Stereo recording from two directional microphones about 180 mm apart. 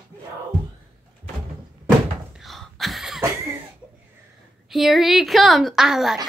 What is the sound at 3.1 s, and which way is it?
Cough, 15° right (ahead or behind).